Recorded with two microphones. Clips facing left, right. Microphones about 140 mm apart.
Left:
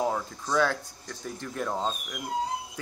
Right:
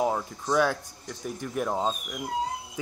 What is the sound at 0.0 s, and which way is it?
A man's voice, 15° right (ahead or behind).